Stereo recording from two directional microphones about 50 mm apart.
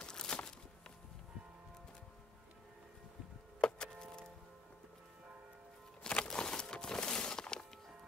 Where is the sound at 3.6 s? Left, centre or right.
Centre.